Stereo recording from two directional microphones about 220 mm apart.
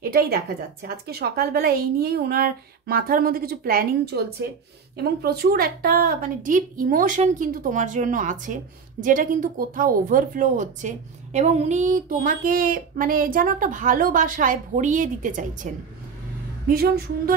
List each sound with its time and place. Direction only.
0.0 s a woman's voice: 45° right (ahead or behind)